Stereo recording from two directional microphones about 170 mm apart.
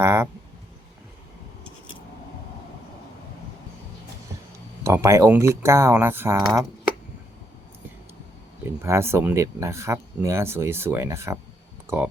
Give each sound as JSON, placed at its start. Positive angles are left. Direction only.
{"t": 0.0, "sound": "speech", "side_deg": -15}
{"t": 4.8, "sound": "speech", "side_deg": -15}
{"t": 8.6, "sound": "speech", "side_deg": -15}